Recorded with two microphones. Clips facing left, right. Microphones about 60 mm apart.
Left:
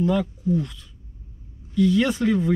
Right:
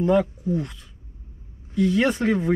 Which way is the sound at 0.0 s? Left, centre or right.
Right.